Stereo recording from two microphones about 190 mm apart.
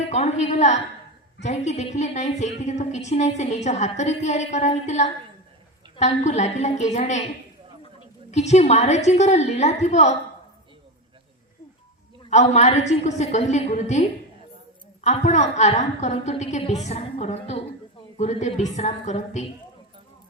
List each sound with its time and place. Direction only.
0.1 s a sound: 40° left (ahead or behind)
1.4 s a woman's voice: 35° left (ahead or behind)
12.3 s a woman's voice: 35° left (ahead or behind)